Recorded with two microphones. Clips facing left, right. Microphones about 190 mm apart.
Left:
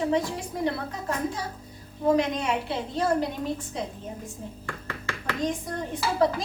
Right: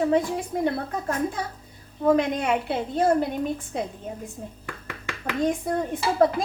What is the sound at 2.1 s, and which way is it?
Speech, 55° right (ahead or behind).